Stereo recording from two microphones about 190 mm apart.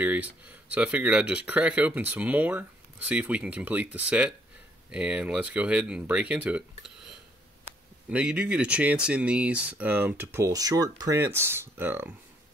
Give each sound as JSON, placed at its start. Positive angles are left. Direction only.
{"t": 0.0, "sound": "speech", "side_deg": -10}
{"t": 8.1, "sound": "speech", "side_deg": -5}